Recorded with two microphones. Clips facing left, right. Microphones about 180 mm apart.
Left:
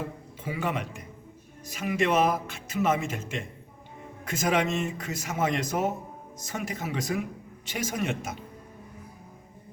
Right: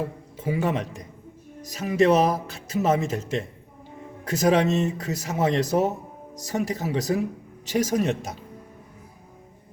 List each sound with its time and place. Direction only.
0.0 s a man's voice: 40° right (ahead or behind)